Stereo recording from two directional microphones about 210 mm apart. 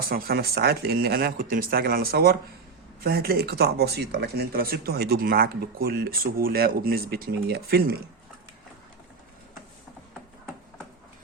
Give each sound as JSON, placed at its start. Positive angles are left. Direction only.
{"t": 0.0, "sound": "speech", "side_deg": -45}